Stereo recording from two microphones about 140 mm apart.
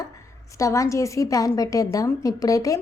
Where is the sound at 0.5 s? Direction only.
20° left (ahead or behind).